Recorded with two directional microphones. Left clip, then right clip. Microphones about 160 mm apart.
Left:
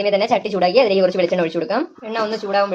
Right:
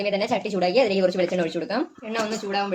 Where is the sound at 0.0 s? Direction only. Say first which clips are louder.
Left 7 dB; 15° left (ahead or behind).